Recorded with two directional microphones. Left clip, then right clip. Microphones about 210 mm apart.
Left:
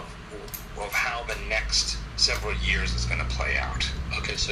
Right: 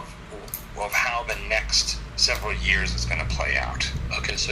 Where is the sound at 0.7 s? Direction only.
25° right (ahead or behind).